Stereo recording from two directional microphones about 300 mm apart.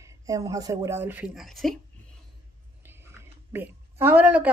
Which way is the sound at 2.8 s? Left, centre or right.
Centre.